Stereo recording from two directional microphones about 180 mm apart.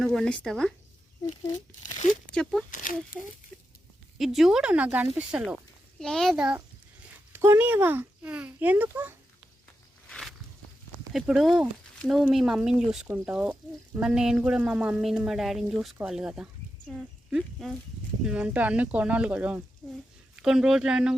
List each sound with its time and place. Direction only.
0.0 s speech: centre (ahead or behind)
2.3 s speech: centre (ahead or behind)
2.6 s speech: 45° left (ahead or behind)
3.5 s a sound: 5° left (ahead or behind)
4.2 s a child's voice: centre (ahead or behind)
10.1 s walk: centre (ahead or behind)
11.1 s a child's voice: centre (ahead or behind)